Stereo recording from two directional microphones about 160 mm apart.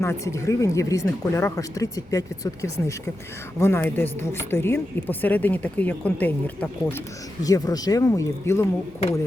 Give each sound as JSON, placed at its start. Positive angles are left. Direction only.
{"t": 0.0, "sound": "speech", "side_deg": 15}
{"t": 7.4, "sound": "speech", "side_deg": 25}